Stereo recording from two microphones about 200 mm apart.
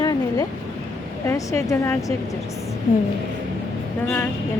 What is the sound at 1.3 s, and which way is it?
Speech, 15° left (ahead or behind).